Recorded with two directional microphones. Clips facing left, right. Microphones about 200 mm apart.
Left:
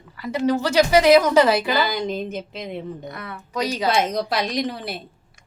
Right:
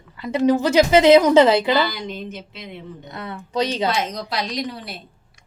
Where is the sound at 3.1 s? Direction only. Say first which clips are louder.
Right 4 dB; 25° right (ahead or behind).